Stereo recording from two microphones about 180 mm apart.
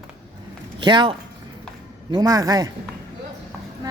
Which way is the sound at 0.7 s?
25° right (ahead or behind).